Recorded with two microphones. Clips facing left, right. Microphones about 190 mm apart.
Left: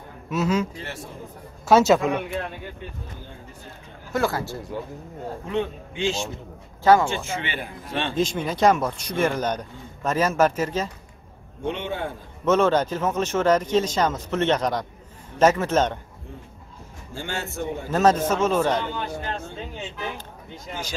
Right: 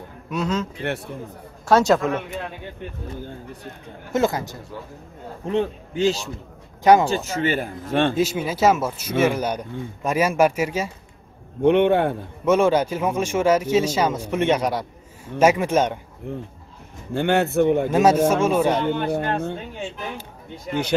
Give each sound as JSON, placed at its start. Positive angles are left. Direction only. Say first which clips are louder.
{"t": 0.3, "sound": "a man's voice", "louder": "left 1 dB", "side_deg": 5}
{"t": 1.7, "sound": "a man's voice", "louder": "even", "side_deg": 5}
{"t": 4.1, "sound": "a man's voice", "louder": "right 3 dB", "side_deg": -20}
{"t": 5.5, "sound": "a man's voice", "louder": "right 5 dB", "side_deg": -35}
{"t": 6.8, "sound": "speech", "louder": "right 2 dB", "side_deg": -15}
{"t": 7.1, "sound": "speech", "louder": "right 6 dB", "side_deg": -40}
{"t": 8.2, "sound": "speech", "louder": "right 1 dB", "side_deg": -5}
{"t": 11.6, "sound": "a man's voice", "louder": "right 12 dB", "side_deg": -60}
{"t": 12.4, "sound": "speech", "louder": "right 2 dB", "side_deg": -10}
{"t": 16.3, "sound": "a man's voice", "louder": "right 11 dB", "side_deg": -60}
{"t": 17.9, "sound": "speech", "louder": "even", "side_deg": -10}
{"t": 18.9, "sound": "a man's voice", "louder": "right 8 dB", "side_deg": -60}